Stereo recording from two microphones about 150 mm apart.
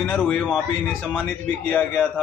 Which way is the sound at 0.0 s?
10° left (ahead or behind).